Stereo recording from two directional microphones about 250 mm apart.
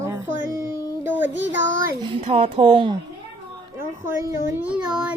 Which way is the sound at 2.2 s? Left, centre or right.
Right.